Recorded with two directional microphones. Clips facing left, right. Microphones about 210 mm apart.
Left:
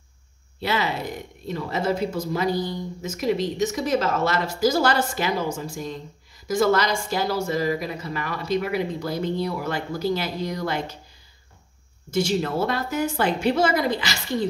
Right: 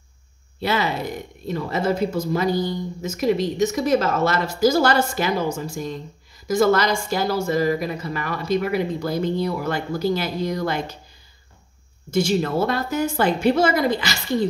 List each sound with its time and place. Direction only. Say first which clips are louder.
0.6 s speech: right 2 dB; 45° right (ahead or behind)
12.1 s speech: right 3 dB; 45° right (ahead or behind)